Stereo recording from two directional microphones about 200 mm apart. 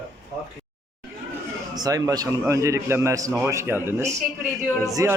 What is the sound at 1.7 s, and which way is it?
A man's voice, 20° right (ahead or behind).